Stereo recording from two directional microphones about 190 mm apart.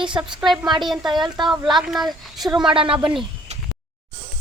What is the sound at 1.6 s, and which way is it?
Speech, centre (ahead or behind).